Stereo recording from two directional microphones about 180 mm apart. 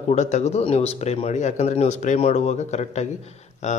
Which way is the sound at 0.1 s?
40° left (ahead or behind).